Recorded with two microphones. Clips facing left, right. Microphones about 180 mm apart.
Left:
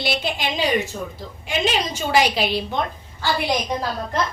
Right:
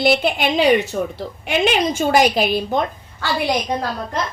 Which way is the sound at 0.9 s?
75° right (ahead or behind).